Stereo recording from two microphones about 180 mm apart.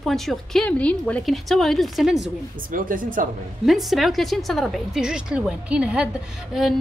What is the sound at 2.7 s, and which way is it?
Speech, 50° right (ahead or behind).